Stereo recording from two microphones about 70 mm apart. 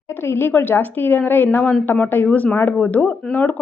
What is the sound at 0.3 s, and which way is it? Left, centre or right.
Speech, left.